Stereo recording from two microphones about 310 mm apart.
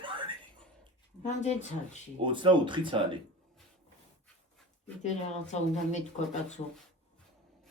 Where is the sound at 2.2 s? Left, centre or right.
Centre.